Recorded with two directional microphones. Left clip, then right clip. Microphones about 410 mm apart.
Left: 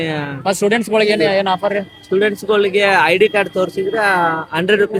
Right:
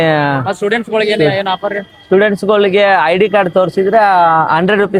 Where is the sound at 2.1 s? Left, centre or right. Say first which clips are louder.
Right 5 dB; right.